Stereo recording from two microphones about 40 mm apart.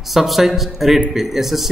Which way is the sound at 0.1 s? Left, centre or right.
Centre.